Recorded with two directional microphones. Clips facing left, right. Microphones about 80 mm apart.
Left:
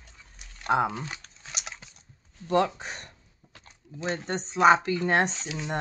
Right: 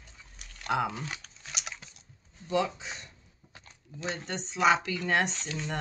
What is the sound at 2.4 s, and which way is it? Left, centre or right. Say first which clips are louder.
Speech: left 5 dB; left.